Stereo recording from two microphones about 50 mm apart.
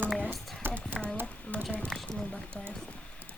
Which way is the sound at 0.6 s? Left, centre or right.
Right.